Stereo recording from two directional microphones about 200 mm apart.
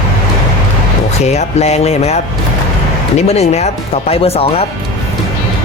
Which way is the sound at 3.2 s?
35° left (ahead or behind).